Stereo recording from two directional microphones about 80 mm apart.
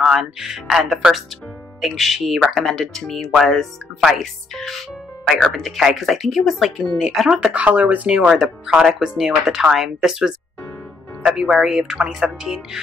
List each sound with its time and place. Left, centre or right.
0.0 s speech: centre
8.2 s speech: centre